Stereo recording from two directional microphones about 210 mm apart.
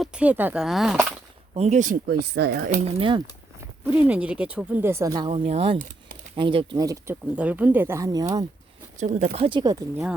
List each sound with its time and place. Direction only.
0.0 s speech: 5° right (ahead or behind)
1.5 s speech: 30° right (ahead or behind); by 2.6 s 50° right (ahead or behind)
2.6 s speech: 25° right (ahead or behind)
4.0 s speech: 5° right (ahead or behind)
9.0 s speech: 35° right (ahead or behind)